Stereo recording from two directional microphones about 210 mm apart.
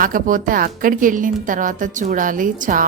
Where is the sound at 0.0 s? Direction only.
40° right (ahead or behind).